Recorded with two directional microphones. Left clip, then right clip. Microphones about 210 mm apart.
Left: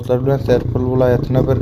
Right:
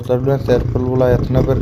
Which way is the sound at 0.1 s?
Centre (ahead or behind).